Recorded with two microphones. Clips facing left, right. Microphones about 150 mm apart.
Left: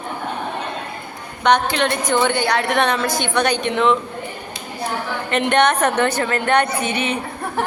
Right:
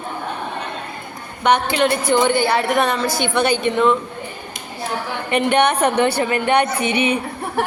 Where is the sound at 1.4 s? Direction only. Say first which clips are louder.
Right 1 dB; 5° right (ahead or behind).